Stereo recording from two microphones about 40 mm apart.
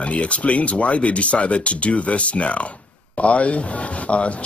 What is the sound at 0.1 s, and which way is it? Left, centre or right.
Speech, left.